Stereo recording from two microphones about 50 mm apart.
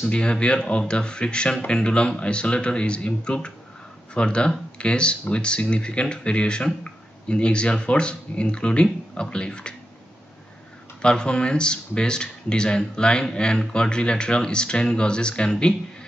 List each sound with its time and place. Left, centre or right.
0.1 s speech: centre
11.0 s speech: centre